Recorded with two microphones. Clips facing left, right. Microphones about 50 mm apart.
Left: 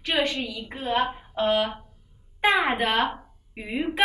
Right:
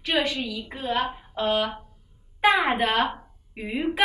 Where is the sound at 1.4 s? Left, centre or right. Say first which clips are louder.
Left 1 dB; centre.